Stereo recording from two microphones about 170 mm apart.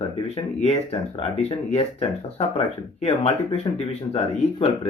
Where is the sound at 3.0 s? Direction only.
35° left (ahead or behind).